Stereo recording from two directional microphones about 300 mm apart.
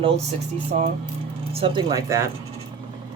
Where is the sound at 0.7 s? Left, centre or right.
Right.